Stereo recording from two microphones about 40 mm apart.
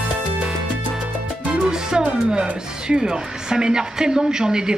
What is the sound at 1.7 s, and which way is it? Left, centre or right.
Speech, centre.